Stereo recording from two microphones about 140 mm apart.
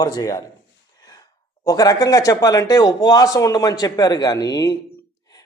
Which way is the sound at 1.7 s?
25° left (ahead or behind).